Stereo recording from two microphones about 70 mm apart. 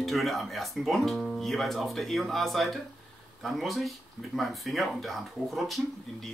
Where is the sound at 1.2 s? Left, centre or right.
Centre.